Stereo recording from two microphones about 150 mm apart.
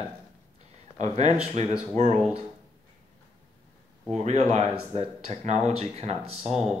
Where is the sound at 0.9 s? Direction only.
45° right (ahead or behind).